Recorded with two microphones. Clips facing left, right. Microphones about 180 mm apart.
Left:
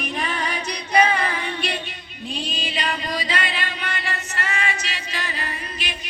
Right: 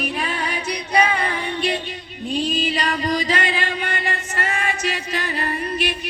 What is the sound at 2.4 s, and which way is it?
Music, 40° right (ahead or behind).